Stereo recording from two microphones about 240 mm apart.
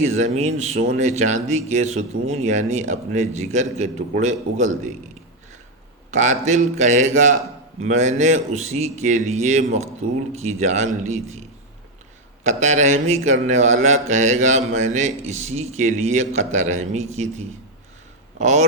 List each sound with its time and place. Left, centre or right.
0.2 s speech: right
6.1 s speech: right